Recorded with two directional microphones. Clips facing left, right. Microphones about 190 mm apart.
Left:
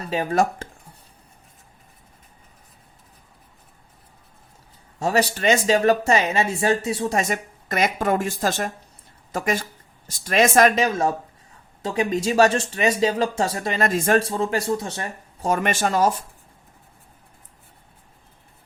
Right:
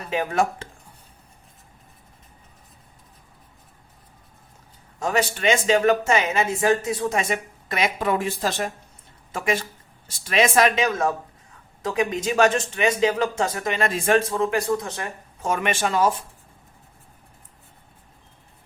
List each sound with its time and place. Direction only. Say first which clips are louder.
0.1 s speech: left 2 dB; 35° left (ahead or behind)
4.9 s speech: left 2 dB; 35° left (ahead or behind)
7.2 s a woman's voice: left 1 dB; 45° left (ahead or behind)
10.8 s speech: left 1 dB; 30° left (ahead or behind)
13.8 s speech: left 1 dB; 45° left (ahead or behind)
15.4 s speech: left 2 dB; 40° left (ahead or behind)